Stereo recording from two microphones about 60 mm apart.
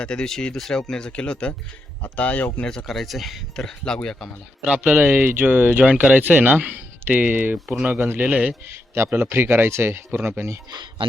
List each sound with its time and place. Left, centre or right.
0.0 s speech: centre
2.6 s speech: centre
4.9 s speech: right
7.5 s speech: right
7.9 s speech: right
8.3 s speech: right
9.3 s speech: right